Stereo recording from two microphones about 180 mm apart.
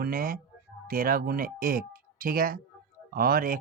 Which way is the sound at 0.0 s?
55° right (ahead or behind).